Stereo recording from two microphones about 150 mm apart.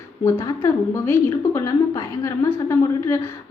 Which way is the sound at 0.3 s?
20° left (ahead or behind).